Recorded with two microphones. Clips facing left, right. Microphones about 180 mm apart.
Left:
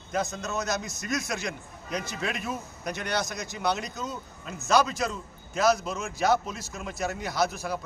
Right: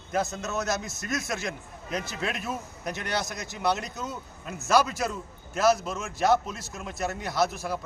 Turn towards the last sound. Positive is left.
turn(degrees=0)  # may be behind; listen again after turning